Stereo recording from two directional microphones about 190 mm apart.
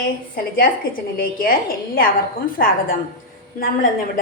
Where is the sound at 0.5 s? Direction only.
50° left (ahead or behind).